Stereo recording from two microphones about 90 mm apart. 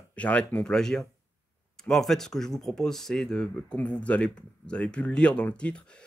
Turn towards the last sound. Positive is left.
turn(degrees=10)  # may be behind; listen again after turning